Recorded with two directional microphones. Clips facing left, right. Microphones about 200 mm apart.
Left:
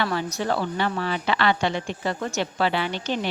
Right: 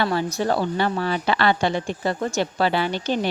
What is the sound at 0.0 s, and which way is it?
A woman's voice, 35° right (ahead or behind).